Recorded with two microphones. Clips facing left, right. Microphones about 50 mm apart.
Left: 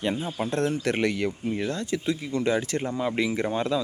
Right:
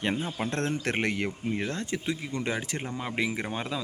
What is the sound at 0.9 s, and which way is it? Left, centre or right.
Speech, right.